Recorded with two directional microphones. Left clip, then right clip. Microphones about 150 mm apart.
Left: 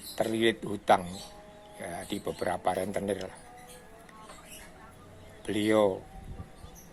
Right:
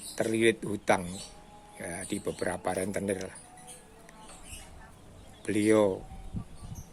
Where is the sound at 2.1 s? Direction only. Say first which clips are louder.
Left 1 dB; 50° right (ahead or behind).